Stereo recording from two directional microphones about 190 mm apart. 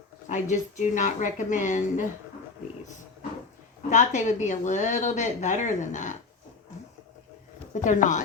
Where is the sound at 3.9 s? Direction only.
40° left (ahead or behind).